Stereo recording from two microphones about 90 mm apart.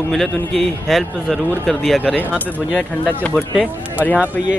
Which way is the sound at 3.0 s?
15° left (ahead or behind).